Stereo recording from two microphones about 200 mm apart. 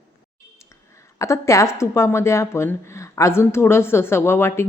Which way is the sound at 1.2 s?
15° left (ahead or behind).